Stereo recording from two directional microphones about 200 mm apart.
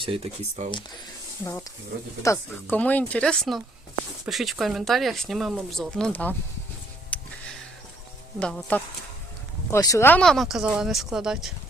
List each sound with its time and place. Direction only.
0.0 s speech: 30° right (ahead or behind)
2.2 s speech: 10° left (ahead or behind)
7.1 s a sound: 5° left (ahead or behind)
8.4 s speech: 5° left (ahead or behind)